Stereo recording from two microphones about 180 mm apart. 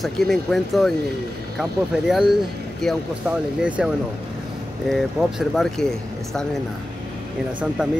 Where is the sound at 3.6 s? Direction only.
5° right (ahead or behind).